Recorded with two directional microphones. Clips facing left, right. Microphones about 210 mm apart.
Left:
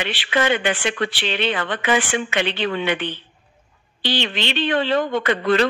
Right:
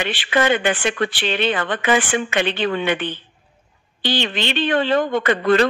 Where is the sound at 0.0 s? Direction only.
50° right (ahead or behind).